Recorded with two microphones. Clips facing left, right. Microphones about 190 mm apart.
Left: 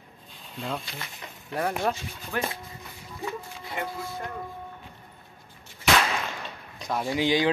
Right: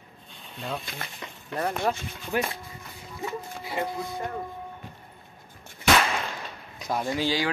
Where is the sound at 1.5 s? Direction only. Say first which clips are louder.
Even; 10° left (ahead or behind).